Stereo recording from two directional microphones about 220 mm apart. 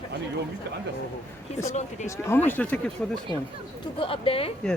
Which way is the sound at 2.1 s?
10° left (ahead or behind).